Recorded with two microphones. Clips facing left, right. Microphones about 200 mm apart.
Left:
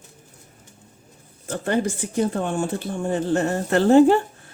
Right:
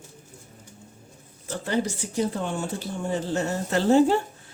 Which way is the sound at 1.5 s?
55° left (ahead or behind).